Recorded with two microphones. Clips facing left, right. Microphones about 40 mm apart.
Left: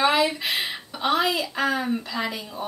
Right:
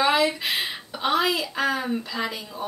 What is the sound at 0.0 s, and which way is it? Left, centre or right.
Speech, centre.